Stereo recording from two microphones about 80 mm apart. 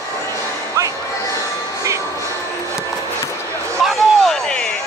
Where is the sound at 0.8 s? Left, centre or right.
Right.